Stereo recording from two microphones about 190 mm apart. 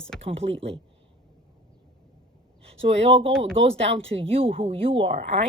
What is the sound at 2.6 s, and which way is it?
Speech, 30° right (ahead or behind).